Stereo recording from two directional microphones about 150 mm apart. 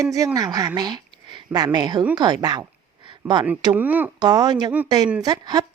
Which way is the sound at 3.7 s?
10° right (ahead or behind).